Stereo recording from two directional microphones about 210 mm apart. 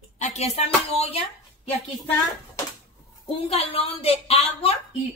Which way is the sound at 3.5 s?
25° left (ahead or behind).